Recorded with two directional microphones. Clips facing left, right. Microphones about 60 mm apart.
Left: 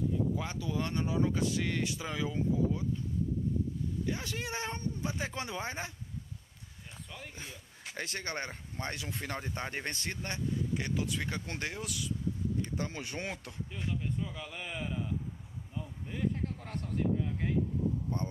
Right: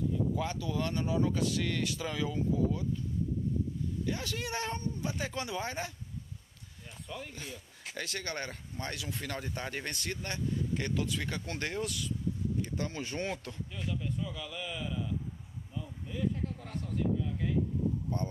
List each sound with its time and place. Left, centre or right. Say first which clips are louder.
0.4 s speech: right 2 dB; left
4.0 s speech: right 1 dB; left
7.3 s speech: right 2 dB; left
10.7 s speech: right 1 dB; centre
11.1 s speech: even; left
11.6 s speech: right 3 dB; centre
12.7 s a man's voice: right 2 dB; centre; by 15.1 s left
15.8 s a sound: even; left
18.1 s speech: right 1 dB; left